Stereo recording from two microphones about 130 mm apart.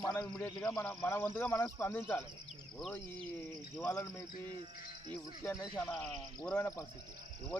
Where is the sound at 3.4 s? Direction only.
20° left (ahead or behind).